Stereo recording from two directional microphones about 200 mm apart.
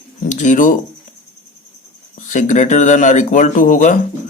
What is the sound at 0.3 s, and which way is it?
Speech, 40° left (ahead or behind).